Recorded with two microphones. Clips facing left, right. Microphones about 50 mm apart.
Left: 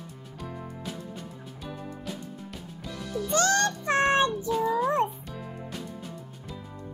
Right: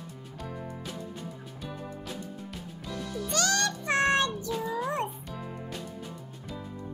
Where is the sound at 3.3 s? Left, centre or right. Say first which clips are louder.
Left 4 dB; left.